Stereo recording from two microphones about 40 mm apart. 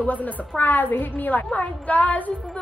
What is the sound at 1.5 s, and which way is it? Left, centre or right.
Speech, left.